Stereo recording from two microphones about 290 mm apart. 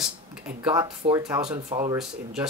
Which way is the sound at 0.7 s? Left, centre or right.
Centre.